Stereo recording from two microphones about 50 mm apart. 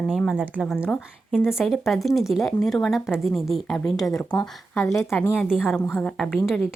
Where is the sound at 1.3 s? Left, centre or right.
Centre.